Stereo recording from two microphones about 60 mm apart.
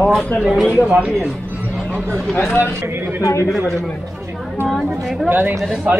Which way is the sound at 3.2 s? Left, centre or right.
Left.